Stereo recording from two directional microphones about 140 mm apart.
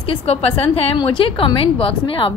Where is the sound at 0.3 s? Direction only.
45° left (ahead or behind).